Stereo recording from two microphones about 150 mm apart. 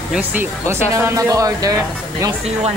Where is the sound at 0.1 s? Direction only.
10° right (ahead or behind).